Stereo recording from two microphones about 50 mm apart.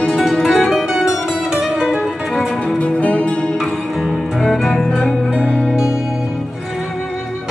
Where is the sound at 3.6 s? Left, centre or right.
Centre.